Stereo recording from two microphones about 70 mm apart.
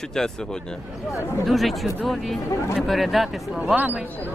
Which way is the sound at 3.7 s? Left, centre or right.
Right.